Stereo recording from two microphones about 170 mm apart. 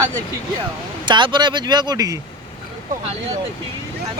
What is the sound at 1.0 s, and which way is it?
Speech, 25° right (ahead or behind).